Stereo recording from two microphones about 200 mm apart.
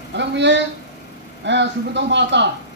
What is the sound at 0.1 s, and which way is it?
Speech, 60° right (ahead or behind).